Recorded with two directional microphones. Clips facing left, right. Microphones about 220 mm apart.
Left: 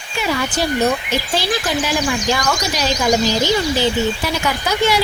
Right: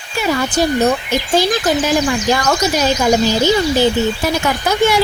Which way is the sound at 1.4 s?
45° right (ahead or behind).